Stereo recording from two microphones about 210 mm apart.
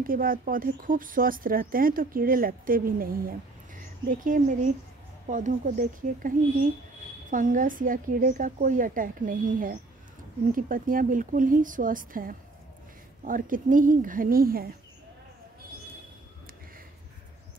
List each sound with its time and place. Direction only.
0.0 s a woman's voice: 40° right (ahead or behind)